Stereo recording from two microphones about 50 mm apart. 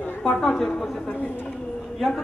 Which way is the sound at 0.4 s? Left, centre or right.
Centre.